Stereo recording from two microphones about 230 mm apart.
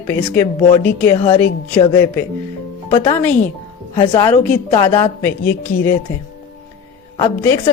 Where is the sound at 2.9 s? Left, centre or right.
Centre.